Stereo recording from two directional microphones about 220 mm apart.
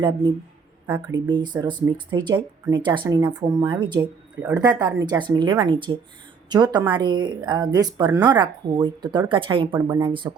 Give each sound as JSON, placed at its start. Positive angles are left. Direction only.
{"t": 1.1, "sound": "speech", "side_deg": -20}